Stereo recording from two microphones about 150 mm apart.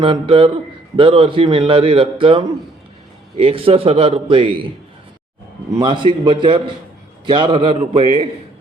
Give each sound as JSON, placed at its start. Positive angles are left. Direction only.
{"t": 0.0, "sound": "a man's voice", "side_deg": -35}
{"t": 5.7, "sound": "a man's voice", "side_deg": -30}